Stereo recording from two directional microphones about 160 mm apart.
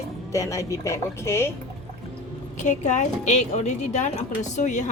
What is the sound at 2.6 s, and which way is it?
A woman's voice, 50° left (ahead or behind).